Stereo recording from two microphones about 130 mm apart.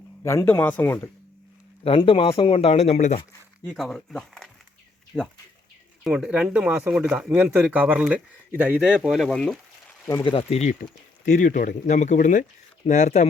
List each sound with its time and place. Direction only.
0.3 s speech: 20° left (ahead or behind)
1.8 s speech: 45° left (ahead or behind)
3.7 s speech: centre (ahead or behind)
6.1 s speech: 10° right (ahead or behind)
10.5 s speech: 65° left (ahead or behind)
11.3 s speech: 90° left; by 13.2 s 65° left (ahead or behind)